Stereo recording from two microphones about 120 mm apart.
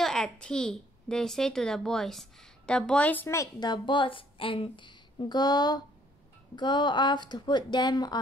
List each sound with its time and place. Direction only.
0.0 s a child's voice: 5° left (ahead or behind)
3.5 s a woman's voice: 35° left (ahead or behind)